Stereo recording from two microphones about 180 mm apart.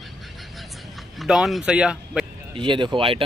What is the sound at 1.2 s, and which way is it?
Speech, centre (ahead or behind).